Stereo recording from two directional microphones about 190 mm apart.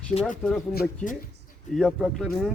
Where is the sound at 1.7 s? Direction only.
Centre (ahead or behind).